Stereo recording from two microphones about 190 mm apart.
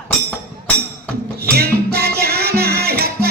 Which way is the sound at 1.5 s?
55° right (ahead or behind).